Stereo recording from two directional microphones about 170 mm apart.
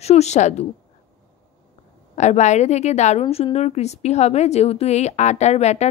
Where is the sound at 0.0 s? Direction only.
40° left (ahead or behind).